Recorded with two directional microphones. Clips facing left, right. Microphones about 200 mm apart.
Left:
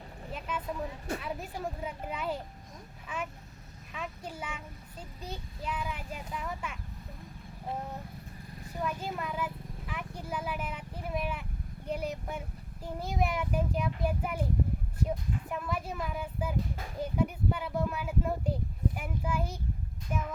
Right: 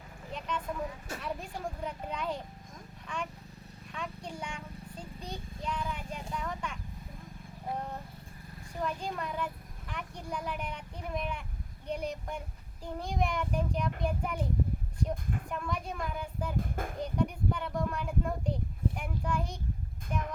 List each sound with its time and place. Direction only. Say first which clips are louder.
0.3 s vehicle: right 1 dB; 5° left (ahead or behind)
1.2 s a child's voice: left 1 dB; 5° left (ahead or behind)
8.8 s a sound: even; 5° left (ahead or behind)
11.9 s a child's voice: left 1 dB; 5° left (ahead or behind)
15.4 s a child's voice: left 2 dB; 5° left (ahead or behind)
16.6 s a child's voice: right 1 dB; 50° right (ahead or behind)
17.0 s a child's voice: left 2 dB; 5° left (ahead or behind)